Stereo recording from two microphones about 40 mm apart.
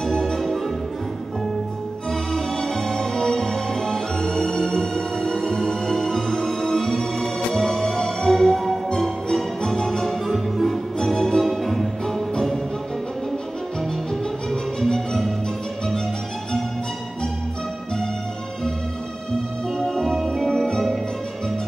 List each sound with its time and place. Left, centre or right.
0.0 s music: centre
2.0 s music: centre
8.9 s music: centre
10.2 s music: centre
11.0 s music: centre
11.4 s music: centre
14.5 s music: centre
19.8 s music: centre